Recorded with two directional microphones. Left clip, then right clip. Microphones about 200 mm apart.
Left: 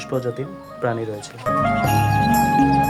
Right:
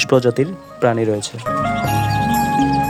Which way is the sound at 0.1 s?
40° right (ahead or behind).